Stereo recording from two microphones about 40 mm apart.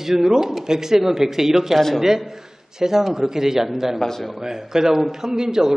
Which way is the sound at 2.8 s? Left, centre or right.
Centre.